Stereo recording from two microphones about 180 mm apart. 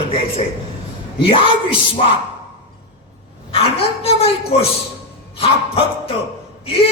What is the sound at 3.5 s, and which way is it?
Speech, 30° left (ahead or behind).